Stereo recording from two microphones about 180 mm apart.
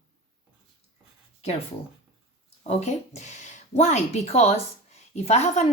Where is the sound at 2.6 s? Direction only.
40° left (ahead or behind).